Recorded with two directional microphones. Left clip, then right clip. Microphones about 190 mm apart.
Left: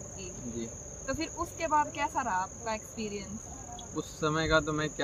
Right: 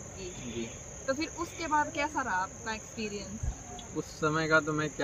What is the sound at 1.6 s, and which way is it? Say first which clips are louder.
Speech: left 1 dB; 15° left (ahead or behind).